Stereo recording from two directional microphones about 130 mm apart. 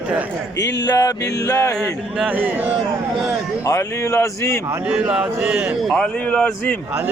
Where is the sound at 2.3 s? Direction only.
10° right (ahead or behind).